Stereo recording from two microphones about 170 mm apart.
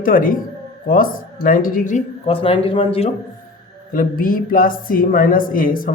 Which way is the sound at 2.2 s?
30° left (ahead or behind).